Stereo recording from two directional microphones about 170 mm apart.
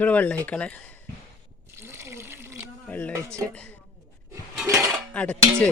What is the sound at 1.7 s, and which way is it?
Water, 15° right (ahead or behind).